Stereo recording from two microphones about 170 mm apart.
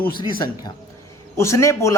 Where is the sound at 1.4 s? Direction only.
15° left (ahead or behind).